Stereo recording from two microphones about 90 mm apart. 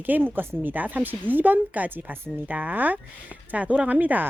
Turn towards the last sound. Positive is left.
turn(degrees=-20)  # may be behind; listen again after turning